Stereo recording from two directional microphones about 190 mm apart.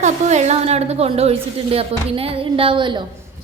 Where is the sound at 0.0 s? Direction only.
35° right (ahead or behind).